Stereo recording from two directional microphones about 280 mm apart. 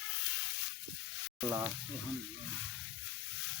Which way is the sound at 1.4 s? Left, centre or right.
Centre.